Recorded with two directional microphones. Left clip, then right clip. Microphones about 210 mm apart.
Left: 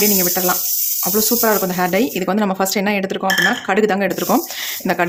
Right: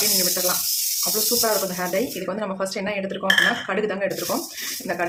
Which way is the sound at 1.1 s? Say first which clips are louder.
Left 6 dB; 55° left (ahead or behind).